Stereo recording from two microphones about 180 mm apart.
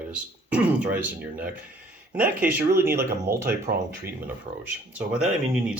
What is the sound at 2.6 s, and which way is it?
Speech, 55° right (ahead or behind).